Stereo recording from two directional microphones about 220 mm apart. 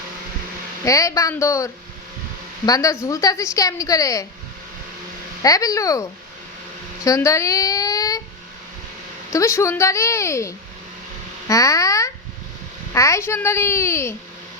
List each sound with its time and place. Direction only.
0.9 s a woman's voice: 15° left (ahead or behind)
5.4 s a woman's voice: 15° left (ahead or behind)
7.0 s a sound: 15° left (ahead or behind)
9.3 s a woman's voice: 15° left (ahead or behind)